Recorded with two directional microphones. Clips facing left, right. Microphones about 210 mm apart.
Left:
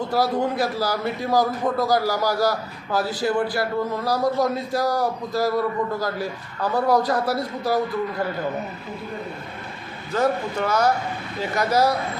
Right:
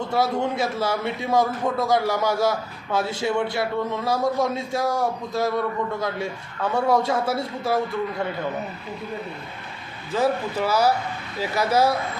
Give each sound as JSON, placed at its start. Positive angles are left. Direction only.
{"t": 0.1, "sound": "a man's voice", "side_deg": 0}
{"t": 10.1, "sound": "a man's voice", "side_deg": 0}